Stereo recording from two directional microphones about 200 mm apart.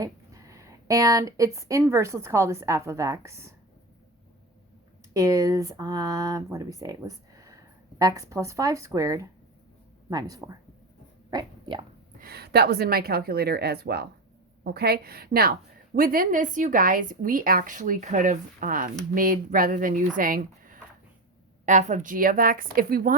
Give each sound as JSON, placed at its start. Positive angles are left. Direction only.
{"t": 0.0, "sound": "a woman's voice", "side_deg": -15}
{"t": 5.1, "sound": "speech", "side_deg": -15}
{"t": 12.2, "sound": "a woman's voice", "side_deg": -50}